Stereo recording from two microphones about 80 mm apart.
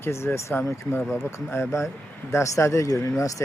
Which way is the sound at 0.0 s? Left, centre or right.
Left.